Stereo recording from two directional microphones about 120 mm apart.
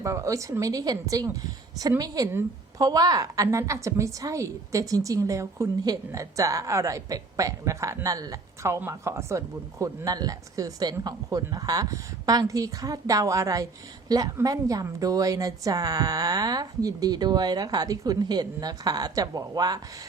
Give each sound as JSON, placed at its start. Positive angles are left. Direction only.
{"t": 0.0, "sound": "a woman's voice", "side_deg": -25}